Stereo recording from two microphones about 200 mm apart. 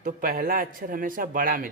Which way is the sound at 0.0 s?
45° right (ahead or behind).